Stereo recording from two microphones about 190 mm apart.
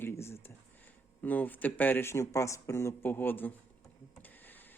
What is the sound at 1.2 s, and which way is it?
Speech, 10° left (ahead or behind).